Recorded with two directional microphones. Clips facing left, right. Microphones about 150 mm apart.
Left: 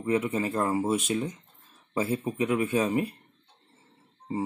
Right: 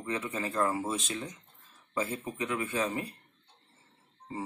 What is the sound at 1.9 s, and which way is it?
Speech, 15° left (ahead or behind).